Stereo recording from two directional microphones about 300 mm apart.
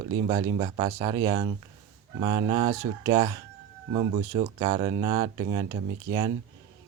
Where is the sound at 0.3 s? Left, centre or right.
Centre.